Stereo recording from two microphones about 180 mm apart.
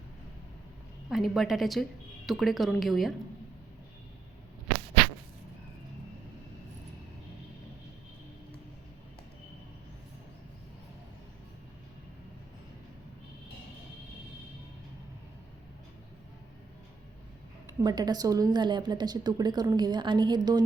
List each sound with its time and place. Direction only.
1.1 s a woman's voice: centre (ahead or behind)
17.8 s a woman's voice: 20° right (ahead or behind)